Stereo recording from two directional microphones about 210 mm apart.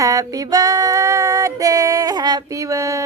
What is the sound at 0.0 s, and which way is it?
Music, 15° right (ahead or behind).